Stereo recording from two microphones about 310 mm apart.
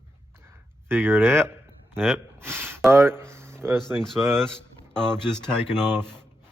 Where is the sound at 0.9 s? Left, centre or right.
Centre.